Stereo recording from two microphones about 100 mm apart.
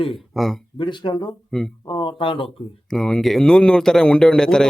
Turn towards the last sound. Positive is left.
turn(degrees=5)  # may be behind; listen again after turning